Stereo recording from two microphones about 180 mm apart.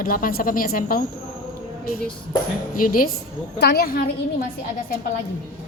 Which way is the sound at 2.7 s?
50° left (ahead or behind).